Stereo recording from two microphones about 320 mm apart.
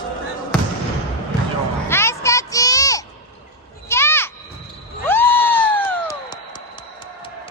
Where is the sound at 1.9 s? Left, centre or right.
Centre.